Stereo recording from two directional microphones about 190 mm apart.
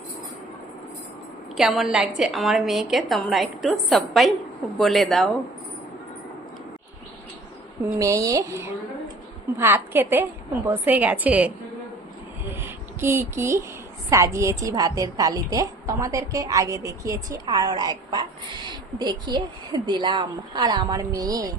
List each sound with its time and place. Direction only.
1.5 s a woman's voice: centre (ahead or behind)
7.9 s a woman's voice: 15° right (ahead or behind)